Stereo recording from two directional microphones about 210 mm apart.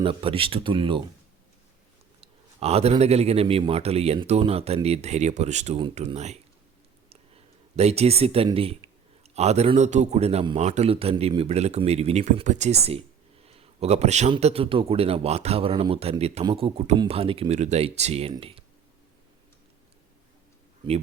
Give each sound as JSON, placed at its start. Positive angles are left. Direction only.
{"t": 0.0, "sound": "speech", "side_deg": -25}
{"t": 2.2, "sound": "speech", "side_deg": -30}
{"t": 7.8, "sound": "speech", "side_deg": -30}